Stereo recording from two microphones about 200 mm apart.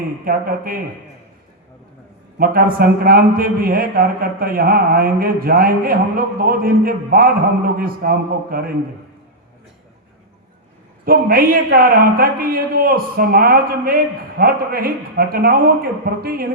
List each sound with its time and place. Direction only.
0.3 s a man's voice: 45° right (ahead or behind)
2.4 s a man's voice: 45° right (ahead or behind)
11.0 s a man's voice: 45° right (ahead or behind)